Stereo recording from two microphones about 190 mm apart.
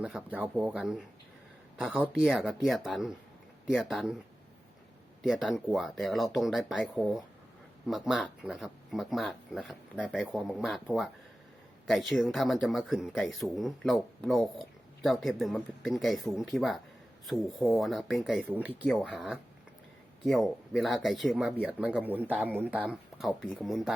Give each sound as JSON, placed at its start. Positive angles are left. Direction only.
{"t": 0.0, "sound": "speech", "side_deg": -5}
{"t": 5.2, "sound": "speech", "side_deg": 0}